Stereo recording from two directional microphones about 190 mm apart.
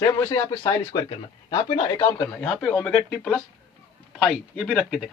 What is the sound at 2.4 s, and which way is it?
Speech, 5° left (ahead or behind).